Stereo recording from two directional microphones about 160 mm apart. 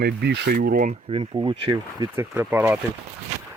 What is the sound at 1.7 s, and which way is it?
Speech, 20° right (ahead or behind).